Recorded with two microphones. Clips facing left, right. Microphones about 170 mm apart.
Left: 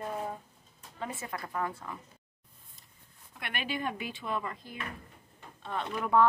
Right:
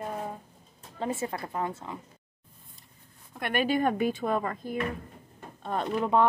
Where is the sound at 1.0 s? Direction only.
30° right (ahead or behind).